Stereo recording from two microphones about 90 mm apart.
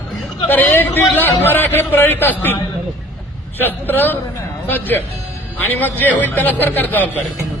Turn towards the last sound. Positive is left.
turn(degrees=20)  # may be behind; listen again after turning